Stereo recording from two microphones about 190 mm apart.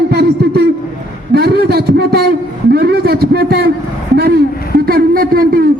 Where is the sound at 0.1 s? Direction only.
55° right (ahead or behind).